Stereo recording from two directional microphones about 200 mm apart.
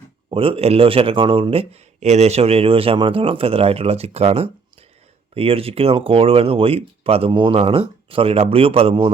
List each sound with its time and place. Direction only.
0.3 s a man's voice: 25° right (ahead or behind)